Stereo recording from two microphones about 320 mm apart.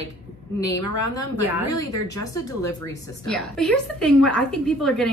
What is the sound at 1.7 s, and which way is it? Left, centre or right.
A woman's voice, centre.